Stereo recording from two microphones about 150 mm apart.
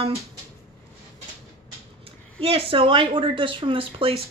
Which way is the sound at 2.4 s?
40° right (ahead or behind).